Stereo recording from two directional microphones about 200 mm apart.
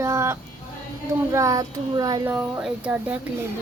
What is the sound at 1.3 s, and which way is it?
A woman's voice, 15° right (ahead or behind).